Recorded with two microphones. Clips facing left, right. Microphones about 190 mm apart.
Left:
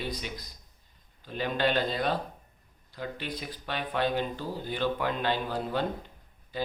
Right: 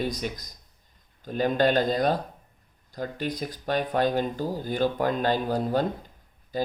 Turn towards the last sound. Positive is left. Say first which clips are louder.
# right 5 dB
turn(degrees=-40)  # may be behind; listen again after turning